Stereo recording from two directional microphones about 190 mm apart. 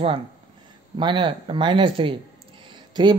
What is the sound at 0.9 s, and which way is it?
Speech, 25° right (ahead or behind).